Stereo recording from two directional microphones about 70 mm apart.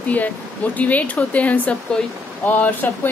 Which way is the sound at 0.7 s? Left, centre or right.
Left.